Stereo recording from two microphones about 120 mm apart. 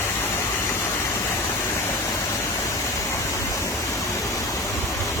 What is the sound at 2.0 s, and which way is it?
Waterfall, 25° left (ahead or behind).